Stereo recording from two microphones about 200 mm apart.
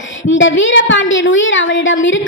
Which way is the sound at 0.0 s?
70° left (ahead or behind).